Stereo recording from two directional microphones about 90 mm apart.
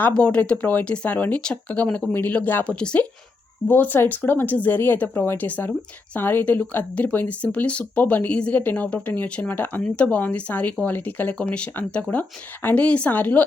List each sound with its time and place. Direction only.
0.0 s speech: 10° left (ahead or behind)